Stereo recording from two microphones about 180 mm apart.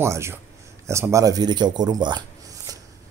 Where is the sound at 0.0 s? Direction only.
15° right (ahead or behind).